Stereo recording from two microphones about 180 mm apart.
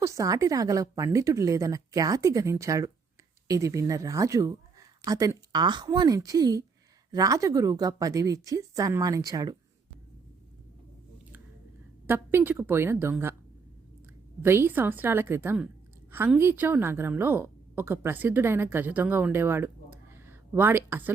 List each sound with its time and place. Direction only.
0.0 s a woman's voice: 15° right (ahead or behind)
12.0 s a woman's voice: 10° right (ahead or behind)
14.4 s a woman's voice: 15° right (ahead or behind)